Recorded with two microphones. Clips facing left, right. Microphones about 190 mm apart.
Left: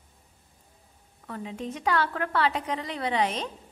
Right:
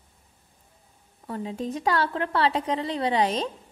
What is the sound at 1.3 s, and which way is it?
A woman's voice, 35° right (ahead or behind).